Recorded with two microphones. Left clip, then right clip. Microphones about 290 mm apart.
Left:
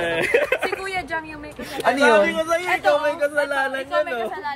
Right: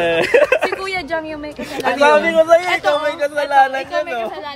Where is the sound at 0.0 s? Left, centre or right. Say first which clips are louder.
Right 7 dB; right.